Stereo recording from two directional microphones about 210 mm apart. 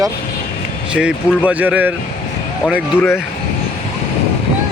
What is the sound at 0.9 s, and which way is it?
Speech, 5° right (ahead or behind).